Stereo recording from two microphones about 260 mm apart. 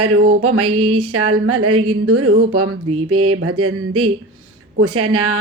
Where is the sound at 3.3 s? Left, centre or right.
Right.